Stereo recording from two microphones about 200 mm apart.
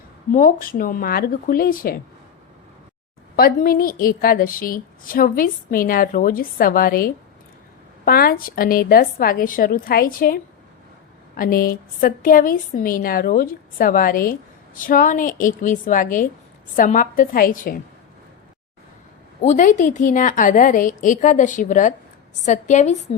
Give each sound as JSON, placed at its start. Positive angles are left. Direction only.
{"t": 0.3, "sound": "a woman's voice", "side_deg": 45}
{"t": 3.3, "sound": "a woman's voice", "side_deg": 50}
{"t": 19.4, "sound": "a woman's voice", "side_deg": 40}